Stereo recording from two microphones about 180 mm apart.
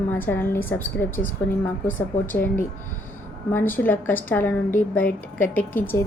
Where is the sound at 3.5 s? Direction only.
10° left (ahead or behind).